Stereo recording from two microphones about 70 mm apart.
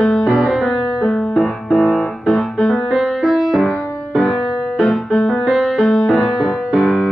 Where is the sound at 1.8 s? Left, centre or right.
Left.